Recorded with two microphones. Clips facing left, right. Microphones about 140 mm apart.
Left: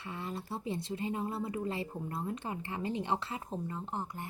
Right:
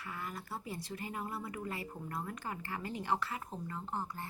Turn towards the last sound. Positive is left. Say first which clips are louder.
# left 1 dB
turn(degrees=20)  # may be behind; listen again after turning